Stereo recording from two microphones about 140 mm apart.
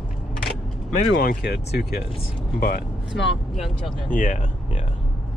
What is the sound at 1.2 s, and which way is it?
Speech, 90° left.